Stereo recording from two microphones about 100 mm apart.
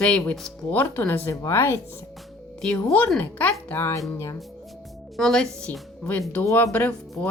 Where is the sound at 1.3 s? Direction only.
30° left (ahead or behind).